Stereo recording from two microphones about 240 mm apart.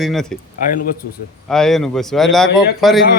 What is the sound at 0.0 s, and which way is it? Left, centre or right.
Speech, centre.